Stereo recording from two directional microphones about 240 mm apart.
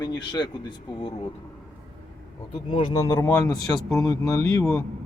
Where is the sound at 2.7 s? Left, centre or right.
Centre.